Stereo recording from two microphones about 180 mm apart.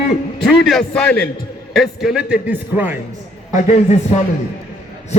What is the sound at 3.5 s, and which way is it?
Speech, 40° left (ahead or behind).